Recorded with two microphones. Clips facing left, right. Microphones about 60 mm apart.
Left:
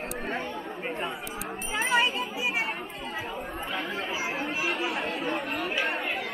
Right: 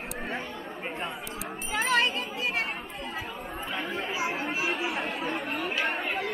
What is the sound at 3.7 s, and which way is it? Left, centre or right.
Chatter, centre.